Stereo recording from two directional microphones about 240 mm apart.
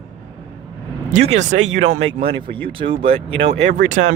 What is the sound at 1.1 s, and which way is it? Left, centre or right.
Speech, right.